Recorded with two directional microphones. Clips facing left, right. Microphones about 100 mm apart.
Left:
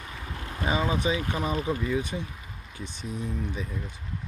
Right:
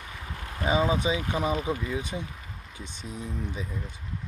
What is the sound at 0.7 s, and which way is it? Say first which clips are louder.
Speech: right 2 dB; 20° right (ahead or behind).